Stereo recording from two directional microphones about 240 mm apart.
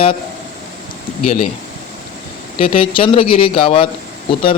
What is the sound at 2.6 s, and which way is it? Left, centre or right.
Speech, left.